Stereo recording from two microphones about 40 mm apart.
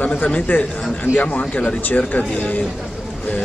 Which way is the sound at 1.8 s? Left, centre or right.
Left.